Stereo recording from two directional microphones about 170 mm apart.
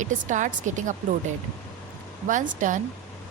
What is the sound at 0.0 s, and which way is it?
Speech, 45° right (ahead or behind).